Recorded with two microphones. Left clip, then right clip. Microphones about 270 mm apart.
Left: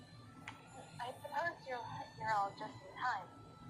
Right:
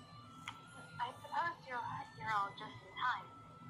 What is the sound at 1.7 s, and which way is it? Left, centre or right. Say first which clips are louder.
Music: right 2 dB; centre.